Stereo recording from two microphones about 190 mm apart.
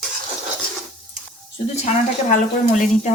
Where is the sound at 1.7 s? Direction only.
40° left (ahead or behind).